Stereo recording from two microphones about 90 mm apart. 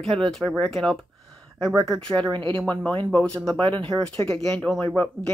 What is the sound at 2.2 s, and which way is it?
Speech, 60° right (ahead or behind).